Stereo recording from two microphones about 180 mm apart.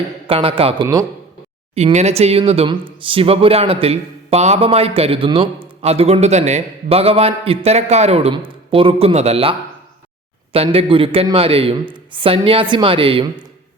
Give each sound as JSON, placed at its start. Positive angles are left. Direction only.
{"t": 0.3, "sound": "speech", "side_deg": -30}
{"t": 1.7, "sound": "speech", "side_deg": -35}